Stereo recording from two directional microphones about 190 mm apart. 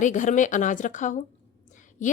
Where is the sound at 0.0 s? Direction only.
40° left (ahead or behind).